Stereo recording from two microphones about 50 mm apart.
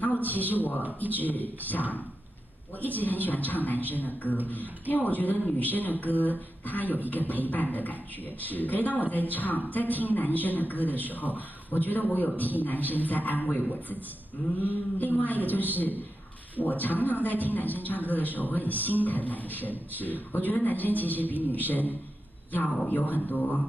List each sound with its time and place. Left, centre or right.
0.0 s a man's voice: left
2.8 s a man's voice: left